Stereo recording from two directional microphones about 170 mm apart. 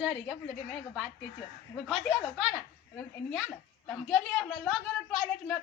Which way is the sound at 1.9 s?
Centre (ahead or behind).